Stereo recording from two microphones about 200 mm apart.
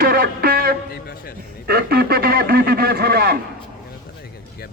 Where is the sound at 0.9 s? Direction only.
50° left (ahead or behind).